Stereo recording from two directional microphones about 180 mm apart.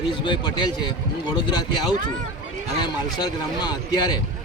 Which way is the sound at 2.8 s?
25° left (ahead or behind).